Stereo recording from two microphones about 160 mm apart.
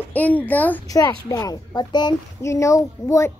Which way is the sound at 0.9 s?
20° left (ahead or behind).